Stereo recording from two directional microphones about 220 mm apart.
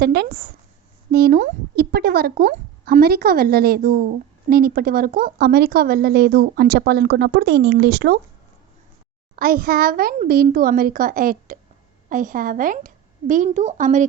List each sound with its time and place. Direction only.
0.0 s a woman's voice: 45° right (ahead or behind)
9.3 s a child's voice: 40° right (ahead or behind)